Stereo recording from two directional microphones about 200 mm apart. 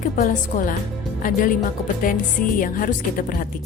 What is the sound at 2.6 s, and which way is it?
Speech, 40° left (ahead or behind).